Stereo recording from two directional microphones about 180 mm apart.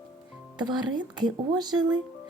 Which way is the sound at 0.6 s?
25° right (ahead or behind).